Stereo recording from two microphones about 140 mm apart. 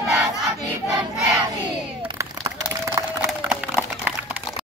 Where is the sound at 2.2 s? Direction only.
20° right (ahead or behind).